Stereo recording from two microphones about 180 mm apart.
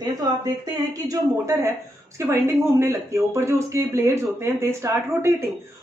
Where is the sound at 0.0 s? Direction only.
20° right (ahead or behind).